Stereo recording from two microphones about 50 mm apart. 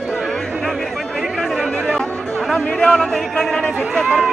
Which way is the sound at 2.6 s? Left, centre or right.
Left.